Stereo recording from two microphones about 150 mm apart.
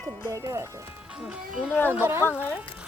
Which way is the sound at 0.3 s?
20° right (ahead or behind).